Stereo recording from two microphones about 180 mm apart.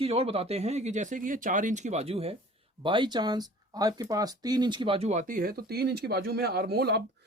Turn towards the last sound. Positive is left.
turn(degrees=-65)  # may be behind; listen again after turning